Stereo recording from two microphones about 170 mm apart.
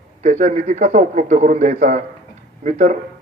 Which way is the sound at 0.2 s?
45° right (ahead or behind).